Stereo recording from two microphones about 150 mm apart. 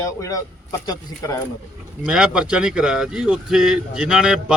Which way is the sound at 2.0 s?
5° right (ahead or behind).